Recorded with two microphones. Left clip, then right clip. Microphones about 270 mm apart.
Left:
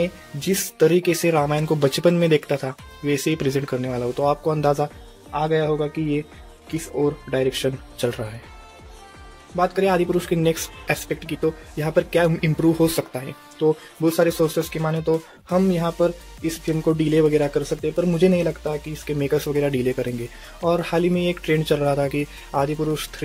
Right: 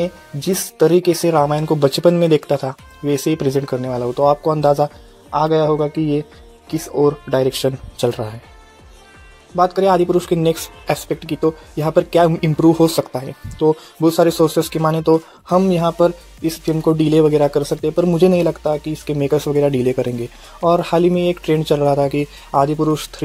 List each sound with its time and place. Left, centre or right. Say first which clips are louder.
0.0 s speech: right 3 dB; centre
9.6 s speech: right 6 dB; centre